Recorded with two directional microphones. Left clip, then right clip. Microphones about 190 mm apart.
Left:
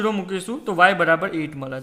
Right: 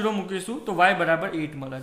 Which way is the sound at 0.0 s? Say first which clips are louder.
Left 3 dB; 30° left (ahead or behind).